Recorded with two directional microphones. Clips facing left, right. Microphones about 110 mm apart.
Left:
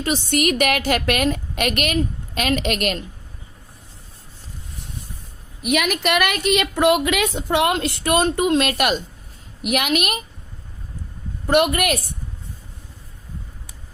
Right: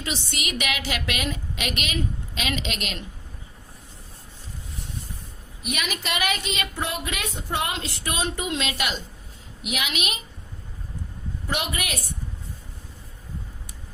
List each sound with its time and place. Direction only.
0.0 s a woman's voice: 50° left (ahead or behind)
5.6 s a woman's voice: 60° left (ahead or behind)
11.4 s a woman's voice: 60° left (ahead or behind)